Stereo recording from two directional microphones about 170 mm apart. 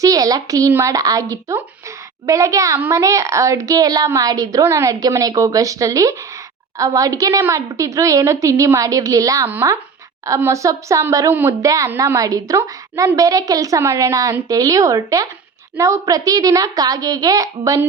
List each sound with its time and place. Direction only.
0.0 s a woman's voice: 20° right (ahead or behind)